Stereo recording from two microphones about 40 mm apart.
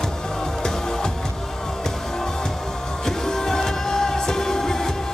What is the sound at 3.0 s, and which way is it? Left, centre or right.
Music, centre.